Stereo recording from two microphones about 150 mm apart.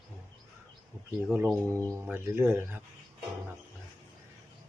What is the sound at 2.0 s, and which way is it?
Speech, 15° right (ahead or behind).